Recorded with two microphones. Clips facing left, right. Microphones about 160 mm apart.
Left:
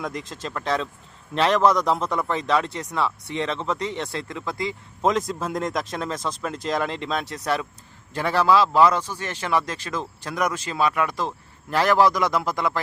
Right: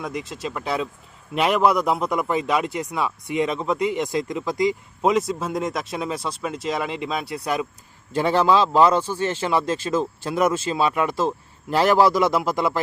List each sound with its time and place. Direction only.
0.0 s speech: centre (ahead or behind)
5.1 s speech: 5° right (ahead or behind); by 12.8 s 20° right (ahead or behind)